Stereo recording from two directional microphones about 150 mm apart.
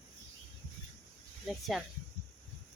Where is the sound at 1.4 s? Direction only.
Centre (ahead or behind).